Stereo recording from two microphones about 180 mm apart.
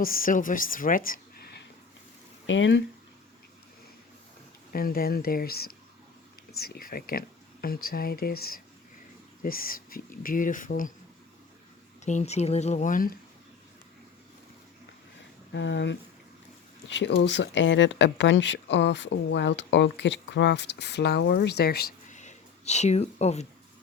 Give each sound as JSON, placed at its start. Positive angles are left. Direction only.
{"t": 0.0, "sound": "speech", "side_deg": 50}
{"t": 2.5, "sound": "speech", "side_deg": 90}
{"t": 4.7, "sound": "speech", "side_deg": 55}
{"t": 12.0, "sound": "speech", "side_deg": 40}
{"t": 15.5, "sound": "speech", "side_deg": 80}
{"t": 22.1, "sound": "a sound", "side_deg": 40}